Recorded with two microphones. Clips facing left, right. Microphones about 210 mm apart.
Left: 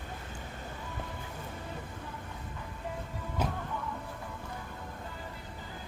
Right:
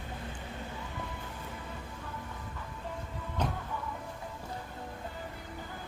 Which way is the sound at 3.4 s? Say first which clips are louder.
Even; 5° left (ahead or behind).